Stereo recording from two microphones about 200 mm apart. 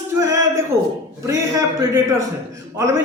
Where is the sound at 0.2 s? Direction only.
15° right (ahead or behind).